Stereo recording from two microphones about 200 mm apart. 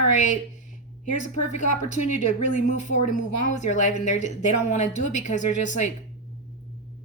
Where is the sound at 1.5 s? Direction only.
40° left (ahead or behind).